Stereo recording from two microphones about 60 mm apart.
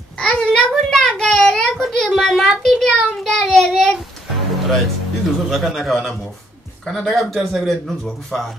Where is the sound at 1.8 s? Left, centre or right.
Centre.